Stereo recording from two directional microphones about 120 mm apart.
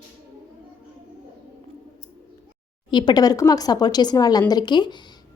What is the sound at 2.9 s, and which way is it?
Speech, 40° left (ahead or behind).